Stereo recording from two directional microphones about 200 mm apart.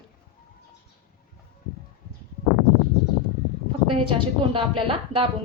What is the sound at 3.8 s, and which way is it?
A woman's voice, 25° right (ahead or behind).